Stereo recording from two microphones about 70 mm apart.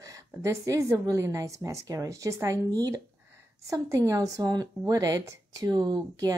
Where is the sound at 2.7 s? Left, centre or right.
Right.